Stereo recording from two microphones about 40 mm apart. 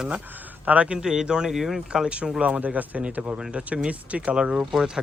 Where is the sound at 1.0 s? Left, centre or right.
Centre.